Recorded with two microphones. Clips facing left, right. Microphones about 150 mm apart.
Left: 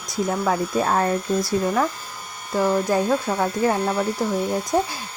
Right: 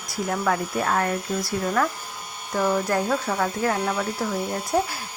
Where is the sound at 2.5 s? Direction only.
15° left (ahead or behind).